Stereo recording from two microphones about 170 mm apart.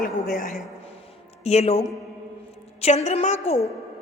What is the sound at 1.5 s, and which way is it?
Speech, 40° left (ahead or behind).